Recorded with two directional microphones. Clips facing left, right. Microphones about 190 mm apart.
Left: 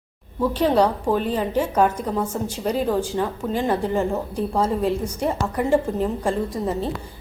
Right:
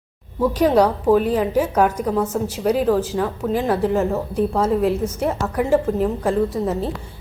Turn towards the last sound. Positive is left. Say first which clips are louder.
# right 3 dB
turn(degrees=-5)  # may be behind; listen again after turning